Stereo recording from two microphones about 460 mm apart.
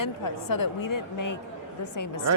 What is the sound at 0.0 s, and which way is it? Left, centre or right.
A woman's voice, left.